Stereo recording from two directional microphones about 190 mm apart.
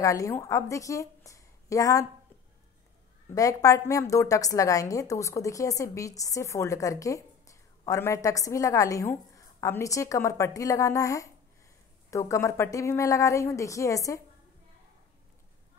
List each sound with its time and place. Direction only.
0.0 s a woman's voice: 15° left (ahead or behind)
3.3 s a woman's voice: 15° left (ahead or behind)